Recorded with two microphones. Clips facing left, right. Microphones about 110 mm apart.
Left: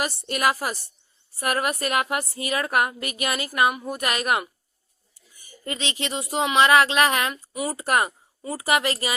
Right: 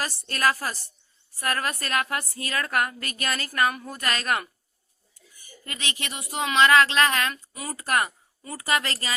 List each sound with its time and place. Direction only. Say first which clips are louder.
0.0 s a woman's voice: left 2 dB; 15° left (ahead or behind)
5.6 s speech: left 5 dB; 25° left (ahead or behind)